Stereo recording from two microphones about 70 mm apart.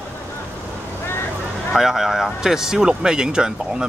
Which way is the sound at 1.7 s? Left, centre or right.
Centre.